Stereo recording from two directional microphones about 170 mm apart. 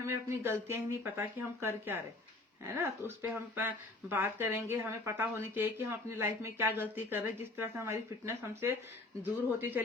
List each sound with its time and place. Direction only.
0.0 s speech: 15° right (ahead or behind)